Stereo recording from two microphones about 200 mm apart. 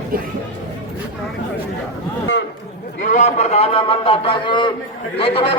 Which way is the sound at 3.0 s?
40° left (ahead or behind).